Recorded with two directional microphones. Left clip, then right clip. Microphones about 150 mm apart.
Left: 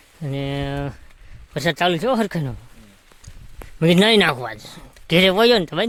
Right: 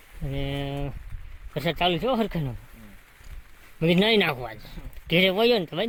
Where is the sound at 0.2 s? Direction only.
50° left (ahead or behind).